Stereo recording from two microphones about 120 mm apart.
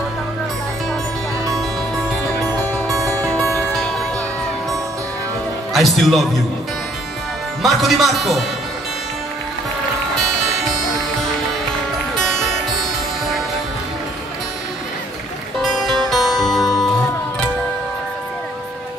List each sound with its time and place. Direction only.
2.9 s music: 25° right (ahead or behind)
5.7 s a man's voice: centre (ahead or behind)
7.6 s a man's voice: centre (ahead or behind)
15.6 s music: centre (ahead or behind)